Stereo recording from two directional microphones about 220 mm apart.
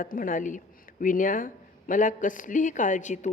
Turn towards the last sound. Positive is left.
turn(degrees=35)  # may be behind; listen again after turning